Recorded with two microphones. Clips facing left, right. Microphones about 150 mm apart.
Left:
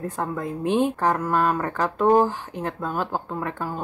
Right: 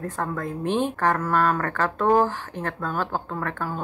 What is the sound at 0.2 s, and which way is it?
Speech, 15° left (ahead or behind).